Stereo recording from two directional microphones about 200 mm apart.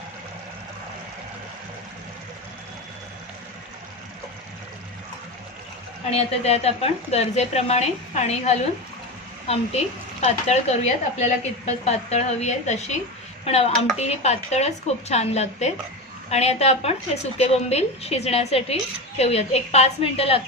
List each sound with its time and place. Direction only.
6.0 s a woman's voice: 30° left (ahead or behind)